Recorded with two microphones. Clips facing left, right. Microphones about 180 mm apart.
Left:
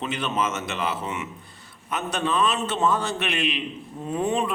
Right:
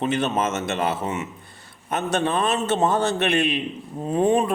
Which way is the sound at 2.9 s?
25° right (ahead or behind).